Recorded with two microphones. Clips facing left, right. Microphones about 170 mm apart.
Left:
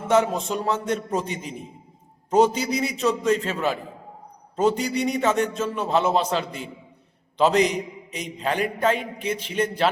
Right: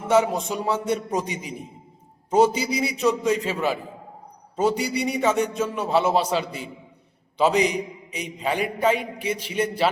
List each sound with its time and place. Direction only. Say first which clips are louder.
0.1 s a man's voice: even; 10° right (ahead or behind)